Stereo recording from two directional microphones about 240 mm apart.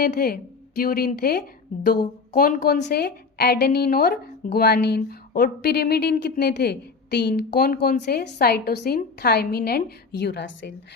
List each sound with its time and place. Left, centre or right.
0.0 s a woman's voice: left